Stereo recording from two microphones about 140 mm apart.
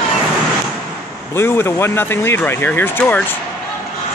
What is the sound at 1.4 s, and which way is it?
Speech, 15° left (ahead or behind).